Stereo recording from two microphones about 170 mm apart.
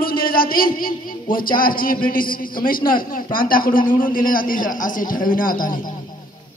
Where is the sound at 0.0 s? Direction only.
60° left (ahead or behind).